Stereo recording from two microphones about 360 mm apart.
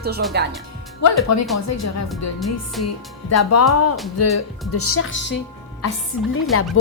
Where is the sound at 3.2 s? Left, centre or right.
Left.